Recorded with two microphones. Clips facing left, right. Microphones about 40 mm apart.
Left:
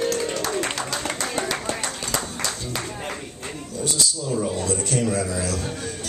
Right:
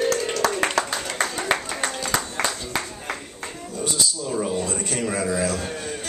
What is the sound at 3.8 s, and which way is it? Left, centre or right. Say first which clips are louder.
A man's voice: even; centre.